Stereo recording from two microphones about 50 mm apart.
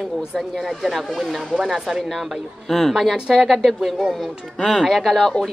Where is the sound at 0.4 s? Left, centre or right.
Centre.